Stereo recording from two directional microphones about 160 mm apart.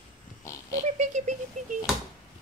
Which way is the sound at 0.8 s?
50° right (ahead or behind).